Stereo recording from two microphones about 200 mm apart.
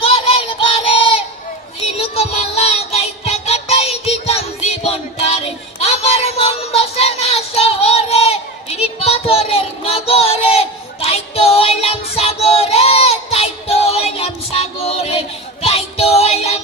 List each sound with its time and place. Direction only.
0.0 s child singing: 30° left (ahead or behind)